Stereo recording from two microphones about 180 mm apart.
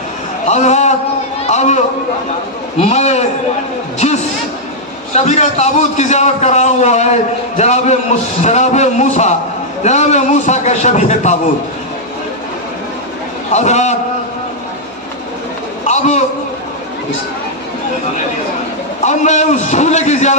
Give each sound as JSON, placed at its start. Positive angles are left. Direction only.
{"t": 0.4, "sound": "a sound", "side_deg": 40}
{"t": 2.7, "sound": "a man's voice", "side_deg": 35}
{"t": 13.5, "sound": "a man's voice", "side_deg": 40}
{"t": 15.9, "sound": "a man's voice", "side_deg": 40}
{"t": 19.0, "sound": "a man's voice", "side_deg": 40}